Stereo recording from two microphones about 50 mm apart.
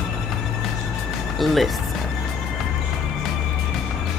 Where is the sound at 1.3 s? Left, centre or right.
Centre.